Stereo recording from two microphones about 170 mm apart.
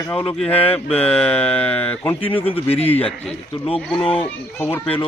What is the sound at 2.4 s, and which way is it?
Speech, 35° left (ahead or behind).